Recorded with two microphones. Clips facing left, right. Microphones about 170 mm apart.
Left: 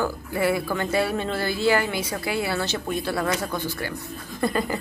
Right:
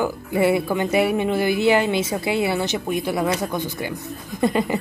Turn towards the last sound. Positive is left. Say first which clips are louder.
# right 4 dB
turn(degrees=-20)  # may be behind; listen again after turning